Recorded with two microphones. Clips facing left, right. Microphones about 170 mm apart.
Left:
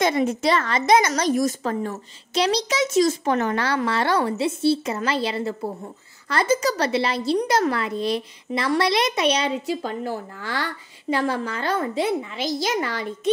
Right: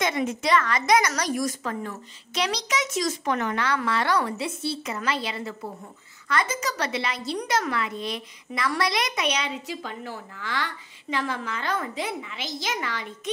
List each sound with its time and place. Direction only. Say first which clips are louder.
0.0 s a woman's voice: left 5 dB; 35° left (ahead or behind)